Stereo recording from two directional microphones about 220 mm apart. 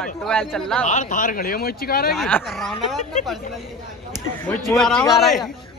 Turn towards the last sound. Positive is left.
turn(degrees=0)  # may be behind; listen again after turning